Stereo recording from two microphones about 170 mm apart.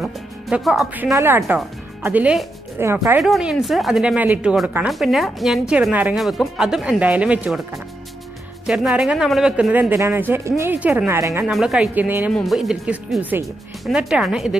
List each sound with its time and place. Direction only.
0.0 s speech: 5° right (ahead or behind)
1.1 s a man's voice: 15° right (ahead or behind)
3.2 s a woman's voice: centre (ahead or behind)
11.5 s a man's voice: 5° right (ahead or behind)
12.3 s a woman's voice: centre (ahead or behind)